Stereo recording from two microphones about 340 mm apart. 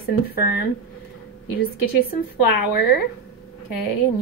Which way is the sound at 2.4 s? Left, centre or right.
Left.